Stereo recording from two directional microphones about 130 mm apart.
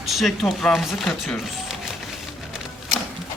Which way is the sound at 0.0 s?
Centre (ahead or behind).